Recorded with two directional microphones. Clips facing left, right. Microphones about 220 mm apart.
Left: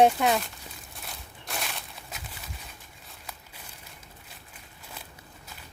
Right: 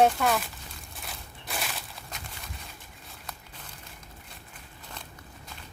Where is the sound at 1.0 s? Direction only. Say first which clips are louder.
Right 1 dB; centre (ahead or behind).